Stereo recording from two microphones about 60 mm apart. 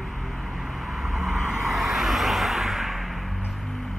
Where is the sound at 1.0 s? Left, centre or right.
Centre.